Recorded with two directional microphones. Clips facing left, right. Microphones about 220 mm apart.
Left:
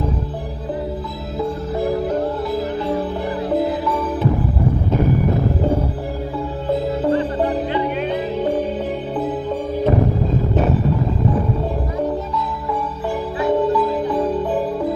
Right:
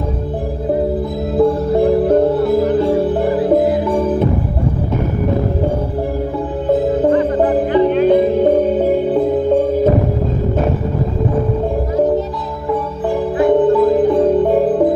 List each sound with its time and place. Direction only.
1.4 s music: 60° right (ahead or behind)
6.7 s music: 50° right (ahead or behind)
13.4 s music: 50° right (ahead or behind)